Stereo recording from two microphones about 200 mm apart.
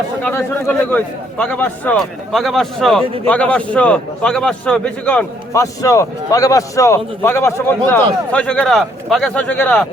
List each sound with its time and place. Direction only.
0.2 s a man's voice: 10° left (ahead or behind)